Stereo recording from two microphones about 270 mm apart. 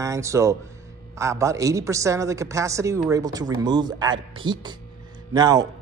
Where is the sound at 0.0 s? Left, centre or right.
Centre.